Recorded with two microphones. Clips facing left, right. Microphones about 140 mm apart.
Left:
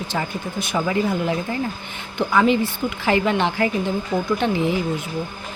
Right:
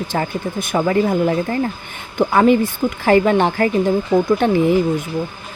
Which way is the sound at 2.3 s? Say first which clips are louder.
Right 4 dB; 45° right (ahead or behind).